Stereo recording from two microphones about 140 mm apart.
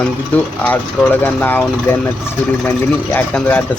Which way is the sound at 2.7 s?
15° left (ahead or behind).